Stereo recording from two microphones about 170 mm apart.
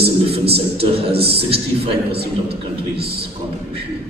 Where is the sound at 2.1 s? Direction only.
70° right (ahead or behind).